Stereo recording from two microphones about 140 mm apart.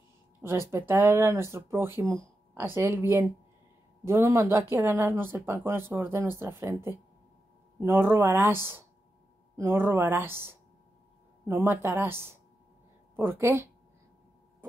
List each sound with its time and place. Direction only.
0.4 s speech: 20° right (ahead or behind)
7.8 s speech: 15° right (ahead or behind)